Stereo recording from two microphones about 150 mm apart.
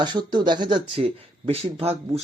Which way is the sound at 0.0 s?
30° right (ahead or behind).